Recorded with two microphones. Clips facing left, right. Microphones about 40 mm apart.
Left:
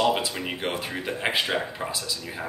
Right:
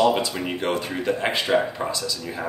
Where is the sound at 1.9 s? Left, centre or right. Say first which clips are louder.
Right 4 dB; centre.